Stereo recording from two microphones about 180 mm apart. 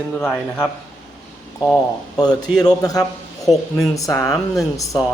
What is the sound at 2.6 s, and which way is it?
A man's voice, 20° left (ahead or behind).